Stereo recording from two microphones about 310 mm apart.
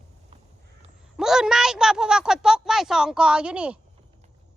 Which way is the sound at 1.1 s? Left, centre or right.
Centre.